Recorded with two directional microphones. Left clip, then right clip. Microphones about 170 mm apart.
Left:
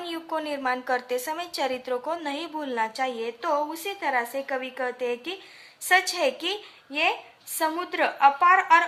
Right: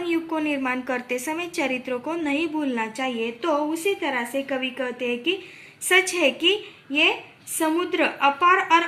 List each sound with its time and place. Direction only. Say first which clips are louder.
0.1 s a woman's voice: right 5 dB; 45° left (ahead or behind)